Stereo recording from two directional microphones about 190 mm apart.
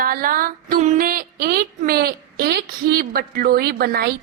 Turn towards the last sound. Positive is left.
turn(degrees=-50)  # may be behind; listen again after turning